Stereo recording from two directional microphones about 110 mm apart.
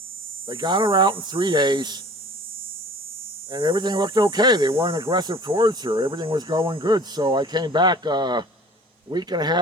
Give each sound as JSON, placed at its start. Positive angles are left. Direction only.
{"t": 0.4, "sound": "speech", "side_deg": -45}
{"t": 3.5, "sound": "speech", "side_deg": -45}